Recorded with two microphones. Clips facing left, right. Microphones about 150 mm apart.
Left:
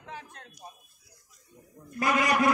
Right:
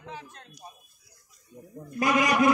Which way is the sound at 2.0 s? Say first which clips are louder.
Right 2 dB; 15° right (ahead or behind).